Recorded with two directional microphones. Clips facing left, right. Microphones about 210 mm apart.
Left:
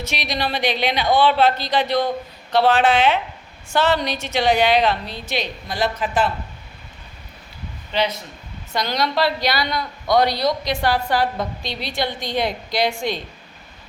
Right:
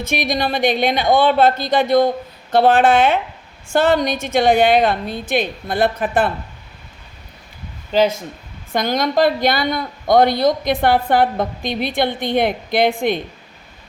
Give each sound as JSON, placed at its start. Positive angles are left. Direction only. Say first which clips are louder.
{"t": 0.0, "sound": "a woman's voice", "louder": "right 5 dB", "side_deg": -50}
{"t": 7.9, "sound": "a woman's voice", "louder": "right 7 dB", "side_deg": -50}